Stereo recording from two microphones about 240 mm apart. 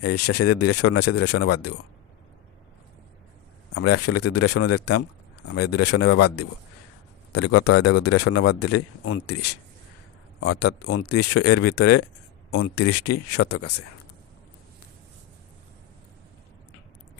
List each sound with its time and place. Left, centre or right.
0.0 s a man's voice: left
3.8 s a man's voice: left